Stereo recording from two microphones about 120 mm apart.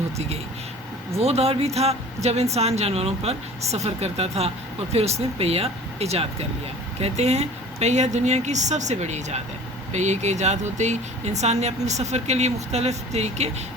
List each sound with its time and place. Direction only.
1.2 s a woman's voice: 60° right (ahead or behind)